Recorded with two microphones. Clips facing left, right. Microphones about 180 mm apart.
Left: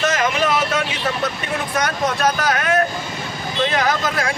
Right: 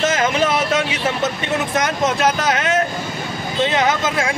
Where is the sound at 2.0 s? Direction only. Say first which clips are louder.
Right 1 dB; 25° right (ahead or behind).